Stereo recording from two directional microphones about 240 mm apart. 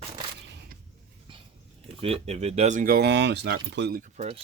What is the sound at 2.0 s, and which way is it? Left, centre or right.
Speech, right.